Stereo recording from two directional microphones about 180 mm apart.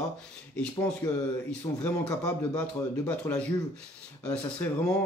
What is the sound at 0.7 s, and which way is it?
Mantra, 20° left (ahead or behind).